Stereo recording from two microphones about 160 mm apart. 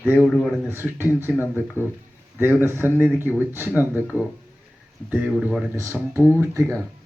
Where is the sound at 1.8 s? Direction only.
15° left (ahead or behind).